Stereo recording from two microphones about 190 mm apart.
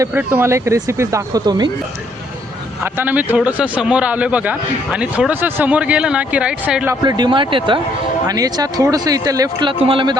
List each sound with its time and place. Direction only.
0.0 s a man's voice: 10° right (ahead or behind)
2.8 s a man's voice: 10° right (ahead or behind)
7.0 s a man's voice: 20° right (ahead or behind)